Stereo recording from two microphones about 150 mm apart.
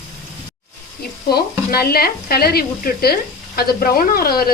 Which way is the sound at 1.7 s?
90° left.